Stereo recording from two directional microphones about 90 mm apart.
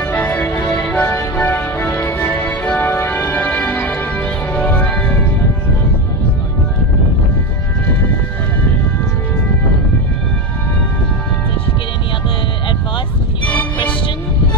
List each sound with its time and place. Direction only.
0.0 s music: 20° left (ahead or behind)
1.0 s music: 25° left (ahead or behind)